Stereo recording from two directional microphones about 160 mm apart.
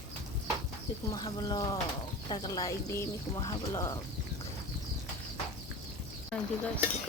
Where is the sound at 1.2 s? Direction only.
30° left (ahead or behind).